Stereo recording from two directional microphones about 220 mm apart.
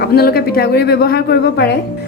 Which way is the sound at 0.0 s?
45° left (ahead or behind).